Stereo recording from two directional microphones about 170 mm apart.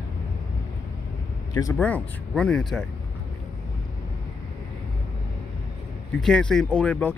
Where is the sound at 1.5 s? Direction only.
20° left (ahead or behind).